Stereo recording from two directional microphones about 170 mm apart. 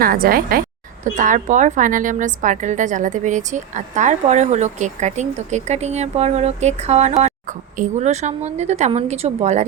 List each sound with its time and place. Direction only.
0.0 s a woman's voice: 60° right (ahead or behind); by 9.6 s 40° right (ahead or behind)